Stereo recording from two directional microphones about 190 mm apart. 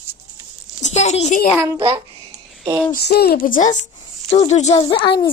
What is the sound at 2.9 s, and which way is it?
A woman's voice, 55° left (ahead or behind).